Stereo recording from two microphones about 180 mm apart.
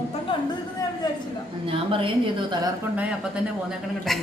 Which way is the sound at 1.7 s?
30° right (ahead or behind).